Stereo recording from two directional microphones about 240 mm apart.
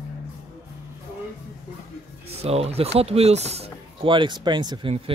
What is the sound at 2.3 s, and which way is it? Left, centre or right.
Speech, right.